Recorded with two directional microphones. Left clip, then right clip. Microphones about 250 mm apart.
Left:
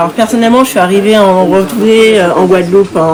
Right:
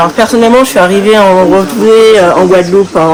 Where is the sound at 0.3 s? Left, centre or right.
Centre.